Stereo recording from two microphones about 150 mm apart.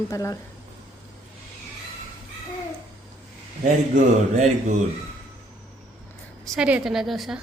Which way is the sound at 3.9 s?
55° right (ahead or behind).